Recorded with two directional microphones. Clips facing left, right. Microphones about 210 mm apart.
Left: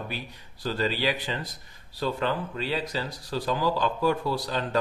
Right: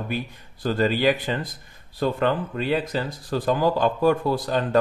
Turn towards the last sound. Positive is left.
turn(degrees=-50)  # may be behind; listen again after turning